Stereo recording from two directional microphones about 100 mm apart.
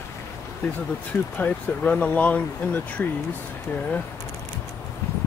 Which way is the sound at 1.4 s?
15° left (ahead or behind).